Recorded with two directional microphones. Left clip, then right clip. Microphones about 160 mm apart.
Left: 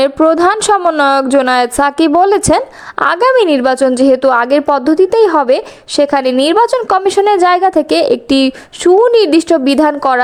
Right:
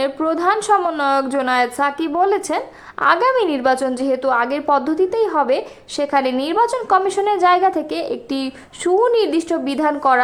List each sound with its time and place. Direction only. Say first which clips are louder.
0.0 s a woman's voice: left 9 dB; 50° left (ahead or behind)